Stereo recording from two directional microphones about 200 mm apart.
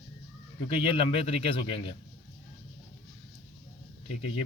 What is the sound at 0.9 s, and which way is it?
Speech, 30° left (ahead or behind).